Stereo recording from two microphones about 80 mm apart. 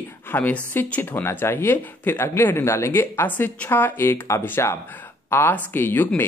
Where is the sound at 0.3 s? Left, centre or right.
Centre.